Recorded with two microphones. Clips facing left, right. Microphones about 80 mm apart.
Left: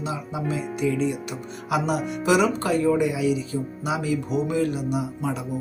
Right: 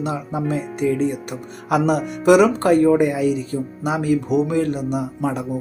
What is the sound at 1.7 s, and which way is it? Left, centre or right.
Speech, right.